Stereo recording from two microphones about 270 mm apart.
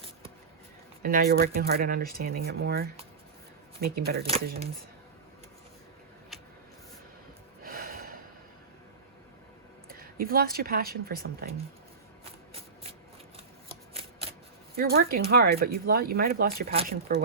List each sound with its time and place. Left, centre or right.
1.0 s speech: right
7.6 s gasp: right
9.9 s speech: right
14.8 s speech: right